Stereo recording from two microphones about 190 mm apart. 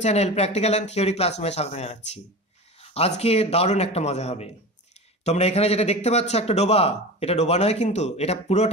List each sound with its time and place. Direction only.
0.0 s a man's voice: 35° left (ahead or behind)